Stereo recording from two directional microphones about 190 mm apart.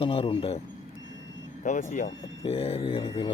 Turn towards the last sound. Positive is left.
turn(degrees=25)  # may be behind; listen again after turning